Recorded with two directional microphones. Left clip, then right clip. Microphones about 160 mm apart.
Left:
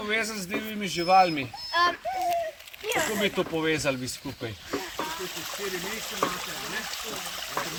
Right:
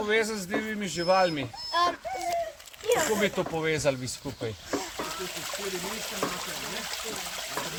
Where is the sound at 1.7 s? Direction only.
75° right (ahead or behind).